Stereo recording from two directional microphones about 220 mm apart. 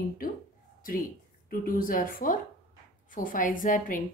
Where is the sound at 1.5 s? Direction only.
40° left (ahead or behind).